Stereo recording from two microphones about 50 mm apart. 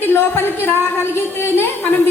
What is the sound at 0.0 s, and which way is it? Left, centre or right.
A woman's voice, left.